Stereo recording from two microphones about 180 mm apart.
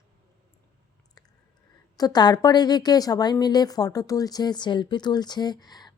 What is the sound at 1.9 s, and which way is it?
A woman's voice, 20° left (ahead or behind).